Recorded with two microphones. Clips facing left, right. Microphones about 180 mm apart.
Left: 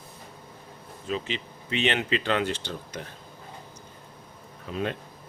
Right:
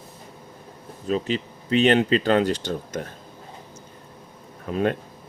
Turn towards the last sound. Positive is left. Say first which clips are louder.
# right 7 dB
turn(degrees=-50)  # may be behind; listen again after turning